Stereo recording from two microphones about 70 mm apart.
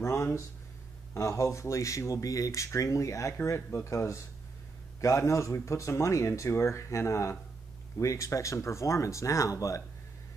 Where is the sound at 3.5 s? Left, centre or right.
Left.